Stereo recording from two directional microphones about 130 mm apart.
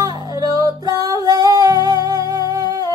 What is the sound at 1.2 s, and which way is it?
Singing, 30° right (ahead or behind).